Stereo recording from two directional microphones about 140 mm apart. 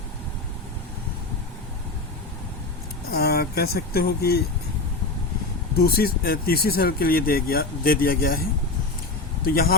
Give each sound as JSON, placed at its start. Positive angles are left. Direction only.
{"t": 3.1, "sound": "speech", "side_deg": 90}
{"t": 5.7, "sound": "speech", "side_deg": 90}
{"t": 9.4, "sound": "speech", "side_deg": 90}